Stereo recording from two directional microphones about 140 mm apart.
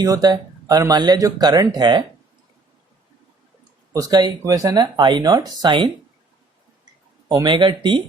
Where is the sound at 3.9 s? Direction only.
25° right (ahead or behind).